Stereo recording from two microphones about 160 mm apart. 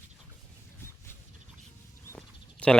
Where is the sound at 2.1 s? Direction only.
5° left (ahead or behind).